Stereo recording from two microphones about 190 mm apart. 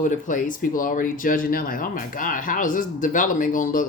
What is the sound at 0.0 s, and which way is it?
Speech, 45° left (ahead or behind).